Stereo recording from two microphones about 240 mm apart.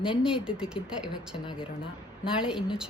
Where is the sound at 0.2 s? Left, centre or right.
Centre.